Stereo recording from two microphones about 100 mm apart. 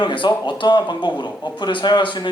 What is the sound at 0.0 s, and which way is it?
Speech, 50° left (ahead or behind).